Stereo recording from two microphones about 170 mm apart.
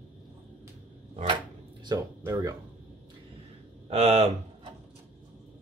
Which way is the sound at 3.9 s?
35° right (ahead or behind).